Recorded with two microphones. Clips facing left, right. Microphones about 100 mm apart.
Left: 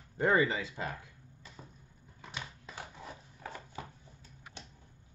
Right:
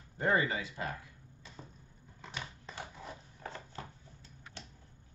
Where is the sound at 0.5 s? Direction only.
25° left (ahead or behind).